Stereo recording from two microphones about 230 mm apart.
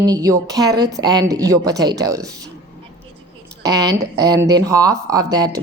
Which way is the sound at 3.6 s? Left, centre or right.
Centre.